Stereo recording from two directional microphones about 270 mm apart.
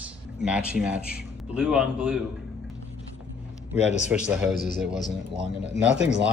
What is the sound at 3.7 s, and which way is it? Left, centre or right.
A man's voice, left.